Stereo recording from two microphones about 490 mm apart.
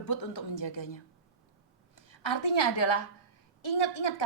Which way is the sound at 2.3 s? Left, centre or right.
Left.